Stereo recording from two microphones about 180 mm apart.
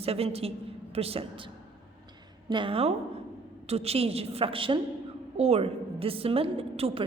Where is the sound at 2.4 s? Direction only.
25° right (ahead or behind).